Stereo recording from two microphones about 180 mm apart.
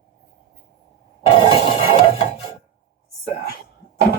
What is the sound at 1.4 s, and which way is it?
Music, 30° left (ahead or behind).